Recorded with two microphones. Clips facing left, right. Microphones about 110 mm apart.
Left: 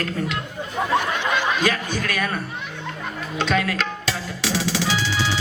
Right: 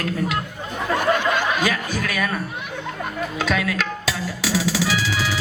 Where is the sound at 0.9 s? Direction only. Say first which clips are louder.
Right 3 dB; 45° right (ahead or behind).